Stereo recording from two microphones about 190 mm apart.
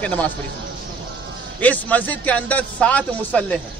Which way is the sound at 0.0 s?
5° left (ahead or behind).